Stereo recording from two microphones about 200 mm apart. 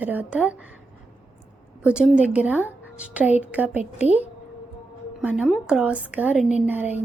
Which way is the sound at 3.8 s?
35° left (ahead or behind).